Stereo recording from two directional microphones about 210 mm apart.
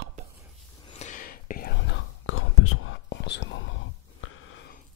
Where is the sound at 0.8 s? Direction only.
30° left (ahead or behind); by 3.0 s 85° left.